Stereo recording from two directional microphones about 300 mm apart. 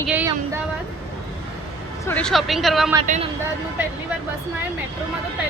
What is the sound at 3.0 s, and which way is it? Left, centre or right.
Speech, right.